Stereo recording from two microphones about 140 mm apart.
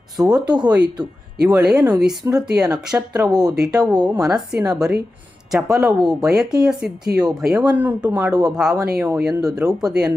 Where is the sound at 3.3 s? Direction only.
30° right (ahead or behind).